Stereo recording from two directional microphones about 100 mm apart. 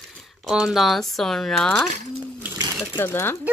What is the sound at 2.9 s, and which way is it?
Speech, 20° left (ahead or behind).